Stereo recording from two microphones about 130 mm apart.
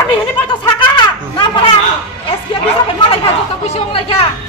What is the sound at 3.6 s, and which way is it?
Chatter, 50° left (ahead or behind).